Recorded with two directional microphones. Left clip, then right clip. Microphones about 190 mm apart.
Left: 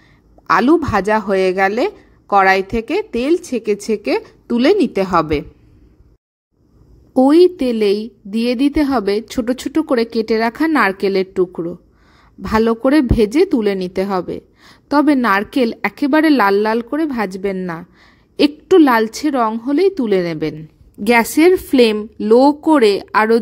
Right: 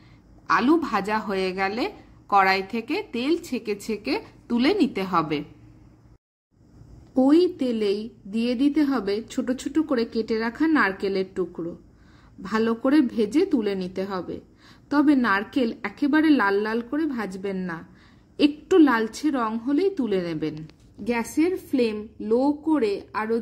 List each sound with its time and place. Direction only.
0.5 s a woman's voice: 30° left (ahead or behind)
7.2 s a woman's voice: 40° left (ahead or behind)